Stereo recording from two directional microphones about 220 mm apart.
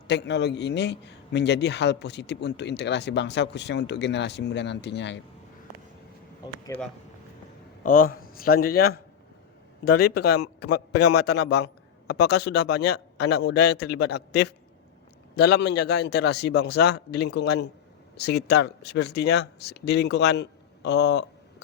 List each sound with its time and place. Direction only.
0.1 s a man's voice: 50° left (ahead or behind)
6.4 s a sound: 10° left (ahead or behind)
7.9 s a man's voice: 40° left (ahead or behind)